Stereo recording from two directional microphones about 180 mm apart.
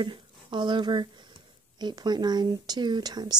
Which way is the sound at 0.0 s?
25° right (ahead or behind).